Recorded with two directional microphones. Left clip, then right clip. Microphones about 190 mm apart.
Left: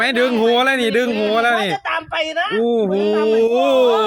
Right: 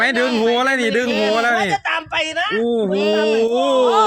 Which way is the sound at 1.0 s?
50° right (ahead or behind).